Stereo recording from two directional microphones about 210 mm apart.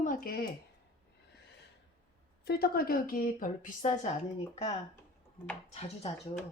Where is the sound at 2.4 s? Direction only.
50° left (ahead or behind).